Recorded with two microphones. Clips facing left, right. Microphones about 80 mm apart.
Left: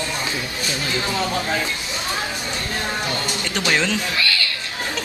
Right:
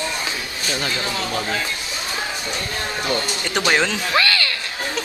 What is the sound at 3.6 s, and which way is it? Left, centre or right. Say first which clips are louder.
Speech: right 1 dB; centre.